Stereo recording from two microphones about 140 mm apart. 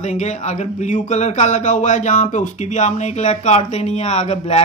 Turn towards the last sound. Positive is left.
turn(degrees=50)  # may be behind; listen again after turning